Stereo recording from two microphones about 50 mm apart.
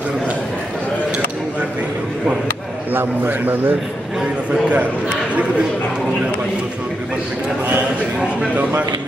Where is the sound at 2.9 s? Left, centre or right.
Right.